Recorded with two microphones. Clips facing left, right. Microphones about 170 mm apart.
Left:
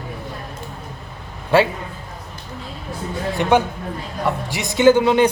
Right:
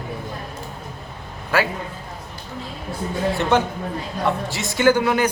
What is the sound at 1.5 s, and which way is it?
Speech, 30° left (ahead or behind).